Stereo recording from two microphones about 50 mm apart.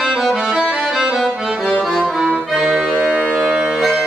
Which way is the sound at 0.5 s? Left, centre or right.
Right.